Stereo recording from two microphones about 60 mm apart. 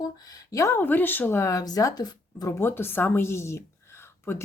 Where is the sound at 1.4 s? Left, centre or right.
Left.